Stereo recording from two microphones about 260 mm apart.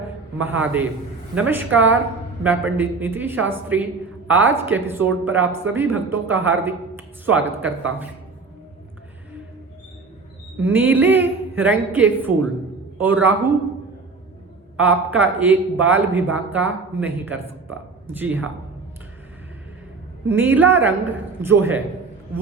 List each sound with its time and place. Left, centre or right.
0.0 s a sound: centre
1.4 s speech: centre
10.6 s speech: centre
14.8 s speech: centre
20.2 s speech: centre